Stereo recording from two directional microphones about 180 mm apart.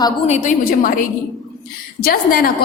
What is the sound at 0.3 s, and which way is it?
A woman's voice, 45° left (ahead or behind).